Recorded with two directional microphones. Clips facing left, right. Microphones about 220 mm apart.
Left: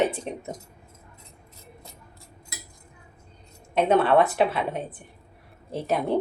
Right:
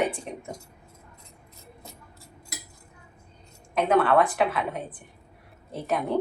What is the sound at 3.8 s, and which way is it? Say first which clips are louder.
A woman's voice: left 2 dB; 30° left (ahead or behind).